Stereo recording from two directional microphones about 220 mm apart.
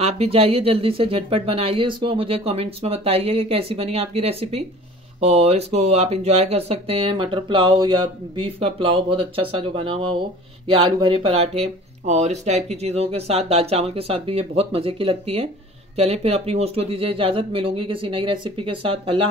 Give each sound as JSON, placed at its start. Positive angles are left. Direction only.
{"t": 0.0, "sound": "speech", "side_deg": -25}